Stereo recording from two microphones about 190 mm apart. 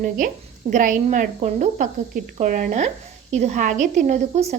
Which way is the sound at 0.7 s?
40° right (ahead or behind).